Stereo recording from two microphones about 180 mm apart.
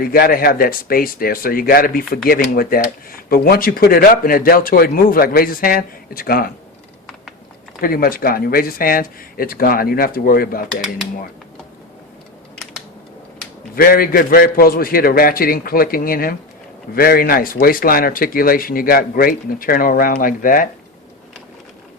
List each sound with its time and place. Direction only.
0.0 s speech: 55° left (ahead or behind)
7.8 s speech: 55° left (ahead or behind)
13.7 s speech: 55° left (ahead or behind)